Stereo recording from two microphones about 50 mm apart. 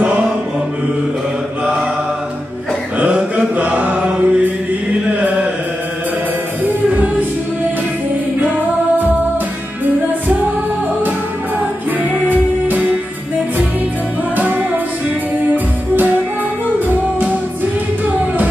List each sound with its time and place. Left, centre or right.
3.0 s mantra: right
12.3 s music: right
14.3 s music: right